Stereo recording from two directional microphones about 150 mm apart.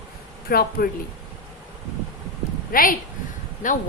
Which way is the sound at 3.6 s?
60° left (ahead or behind).